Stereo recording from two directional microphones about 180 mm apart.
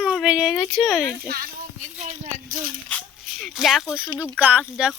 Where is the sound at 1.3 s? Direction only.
65° right (ahead or behind).